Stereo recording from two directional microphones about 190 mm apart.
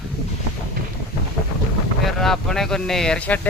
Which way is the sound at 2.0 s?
Centre (ahead or behind).